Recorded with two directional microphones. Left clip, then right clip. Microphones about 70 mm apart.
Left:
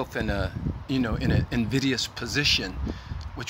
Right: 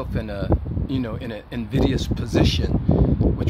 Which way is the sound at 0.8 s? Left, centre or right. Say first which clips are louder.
Left 1 dB; centre.